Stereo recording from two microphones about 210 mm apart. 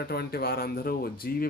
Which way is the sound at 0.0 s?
50° left (ahead or behind).